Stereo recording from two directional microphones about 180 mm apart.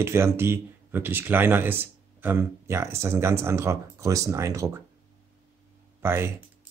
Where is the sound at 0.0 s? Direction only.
15° right (ahead or behind).